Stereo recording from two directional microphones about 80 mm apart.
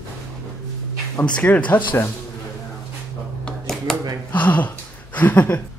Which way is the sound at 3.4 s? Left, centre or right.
Centre.